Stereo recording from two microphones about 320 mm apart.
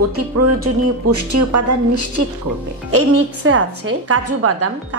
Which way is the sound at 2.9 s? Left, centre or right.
Right.